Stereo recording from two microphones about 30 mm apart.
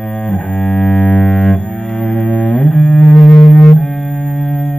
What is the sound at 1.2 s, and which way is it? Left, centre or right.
Double bass, left.